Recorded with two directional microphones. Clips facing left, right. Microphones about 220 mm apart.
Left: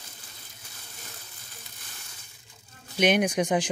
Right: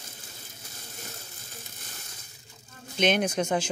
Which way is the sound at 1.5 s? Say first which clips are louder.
Right 4 dB; 45° right (ahead or behind).